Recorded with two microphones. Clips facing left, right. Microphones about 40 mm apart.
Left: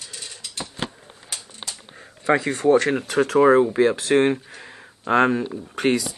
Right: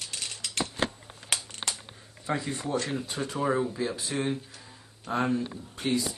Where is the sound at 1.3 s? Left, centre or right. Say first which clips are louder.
Right 4 dB; right.